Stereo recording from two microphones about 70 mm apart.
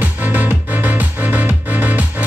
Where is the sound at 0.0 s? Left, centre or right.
Right.